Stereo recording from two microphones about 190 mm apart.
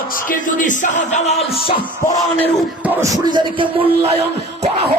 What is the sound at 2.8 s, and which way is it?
Speech, 15° right (ahead or behind).